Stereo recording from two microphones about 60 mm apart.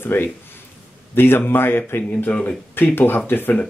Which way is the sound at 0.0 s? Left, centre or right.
Left.